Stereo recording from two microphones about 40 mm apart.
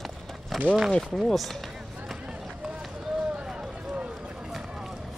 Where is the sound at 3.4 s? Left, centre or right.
Centre.